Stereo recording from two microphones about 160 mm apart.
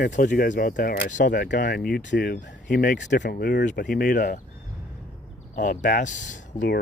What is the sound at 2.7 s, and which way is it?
Speech, 55° left (ahead or behind).